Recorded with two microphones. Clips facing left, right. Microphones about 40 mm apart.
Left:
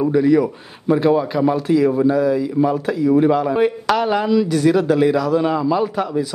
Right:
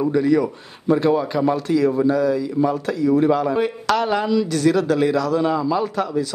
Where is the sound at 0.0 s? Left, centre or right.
Centre.